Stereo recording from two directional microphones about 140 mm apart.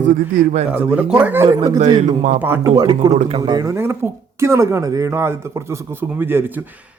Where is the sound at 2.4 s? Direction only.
15° right (ahead or behind).